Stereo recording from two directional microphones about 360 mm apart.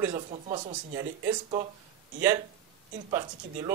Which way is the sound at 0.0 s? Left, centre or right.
Centre.